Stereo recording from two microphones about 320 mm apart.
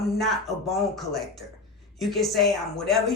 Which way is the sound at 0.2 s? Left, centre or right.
Centre.